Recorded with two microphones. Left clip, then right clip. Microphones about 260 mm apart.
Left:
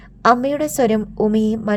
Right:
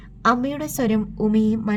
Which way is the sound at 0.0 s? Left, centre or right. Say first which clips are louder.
Left 5 dB; left.